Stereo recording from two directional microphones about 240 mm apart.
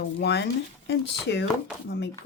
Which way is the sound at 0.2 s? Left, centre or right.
Left.